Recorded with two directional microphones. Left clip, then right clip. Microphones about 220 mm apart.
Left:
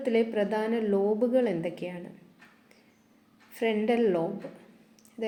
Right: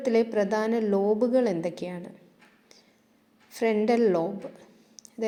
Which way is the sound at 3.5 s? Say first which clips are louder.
Right 3 dB; 20° right (ahead or behind).